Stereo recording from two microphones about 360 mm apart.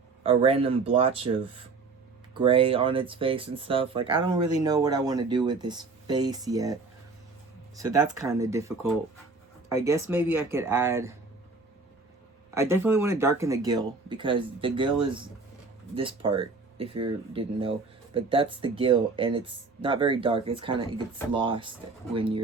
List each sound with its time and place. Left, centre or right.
0.2 s speech: centre
2.4 s speech: centre
7.9 s speech: centre
12.5 s speech: centre